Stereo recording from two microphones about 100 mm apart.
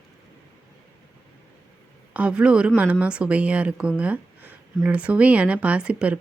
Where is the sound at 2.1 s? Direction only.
10° right (ahead or behind).